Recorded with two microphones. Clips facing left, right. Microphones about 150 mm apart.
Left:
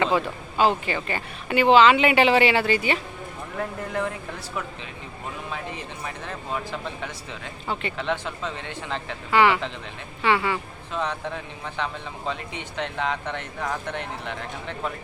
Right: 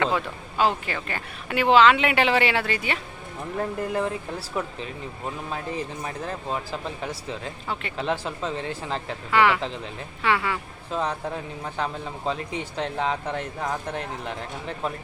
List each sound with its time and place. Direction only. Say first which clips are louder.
0.0 s speech: left 2 dB; centre (ahead or behind)
4.6 s speech: right 5 dB; 35° right (ahead or behind)
7.0 s speech: right 3 dB; 35° right (ahead or behind)
7.7 s speech: left 4 dB; centre (ahead or behind)
7.9 s speech: right 1 dB; 35° right (ahead or behind)
9.3 s speech: left 1 dB; centre (ahead or behind)
10.9 s speech: right 1 dB; 35° right (ahead or behind)